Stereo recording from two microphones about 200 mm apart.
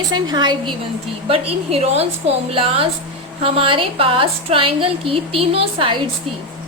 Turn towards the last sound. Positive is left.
turn(degrees=-25)  # may be behind; listen again after turning